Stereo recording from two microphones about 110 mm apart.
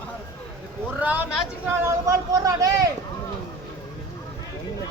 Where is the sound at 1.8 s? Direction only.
30° right (ahead or behind).